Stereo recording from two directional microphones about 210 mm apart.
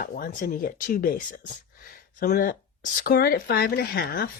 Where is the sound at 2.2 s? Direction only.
40° left (ahead or behind).